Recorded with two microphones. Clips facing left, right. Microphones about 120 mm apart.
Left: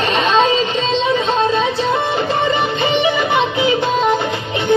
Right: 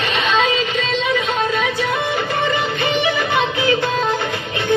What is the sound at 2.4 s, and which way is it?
Music, 25° left (ahead or behind).